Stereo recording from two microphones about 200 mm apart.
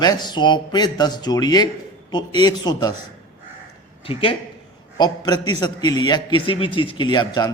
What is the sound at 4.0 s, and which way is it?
A man's voice, 25° left (ahead or behind).